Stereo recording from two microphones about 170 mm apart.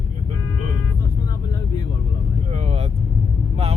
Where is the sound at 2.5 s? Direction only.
40° right (ahead or behind).